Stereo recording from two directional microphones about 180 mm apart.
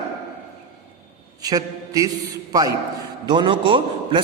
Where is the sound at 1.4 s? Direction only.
20° right (ahead or behind).